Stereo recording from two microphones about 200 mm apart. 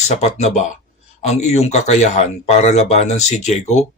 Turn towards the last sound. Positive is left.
turn(degrees=35)  # may be behind; listen again after turning